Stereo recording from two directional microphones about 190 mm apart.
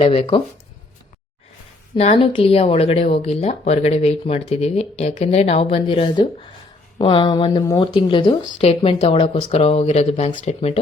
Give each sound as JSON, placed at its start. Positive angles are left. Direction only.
{"t": 0.0, "sound": "speech", "side_deg": 30}
{"t": 2.0, "sound": "speech", "side_deg": 30}